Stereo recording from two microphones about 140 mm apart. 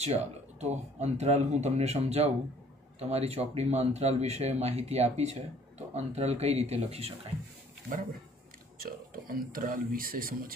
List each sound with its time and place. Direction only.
0.0 s speech: 50° right (ahead or behind)
8.7 s a man's voice: 90° right